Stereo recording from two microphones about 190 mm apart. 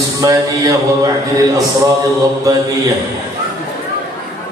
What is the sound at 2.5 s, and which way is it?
A capella, 20° right (ahead or behind).